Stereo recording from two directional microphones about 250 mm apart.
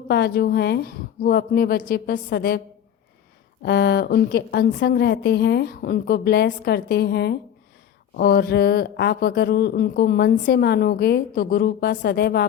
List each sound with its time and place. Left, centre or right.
0.1 s speech: left
3.6 s speech: left